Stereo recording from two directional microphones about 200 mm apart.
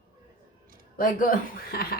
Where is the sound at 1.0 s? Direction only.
45° left (ahead or behind).